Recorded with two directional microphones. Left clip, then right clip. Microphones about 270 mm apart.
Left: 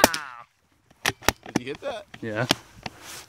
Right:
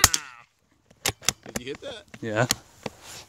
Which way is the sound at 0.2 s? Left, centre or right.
Left.